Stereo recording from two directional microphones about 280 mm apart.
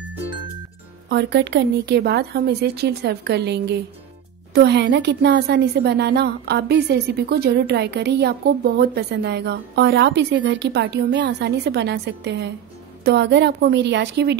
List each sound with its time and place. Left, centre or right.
1.0 s a woman's voice: right